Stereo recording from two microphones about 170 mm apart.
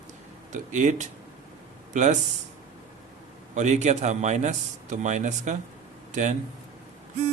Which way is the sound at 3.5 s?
45° right (ahead or behind).